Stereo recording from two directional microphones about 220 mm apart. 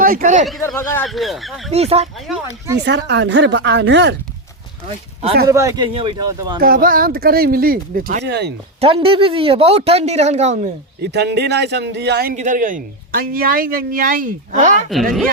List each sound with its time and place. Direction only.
0.0 s speech: 35° right (ahead or behind)
0.8 s speech: 10° left (ahead or behind)
1.7 s speech: 30° right (ahead or behind)
2.8 s speech: 50° right (ahead or behind)
5.5 s speech: 15° right (ahead or behind)
6.6 s a man's voice: 40° right (ahead or behind)
8.8 s speech: 25° right (ahead or behind)
11.0 s a man's voice: 50° right (ahead or behind); by 14.8 s 35° right (ahead or behind)